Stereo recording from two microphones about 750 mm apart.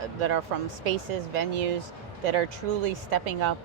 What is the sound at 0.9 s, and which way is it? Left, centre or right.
Speech, right.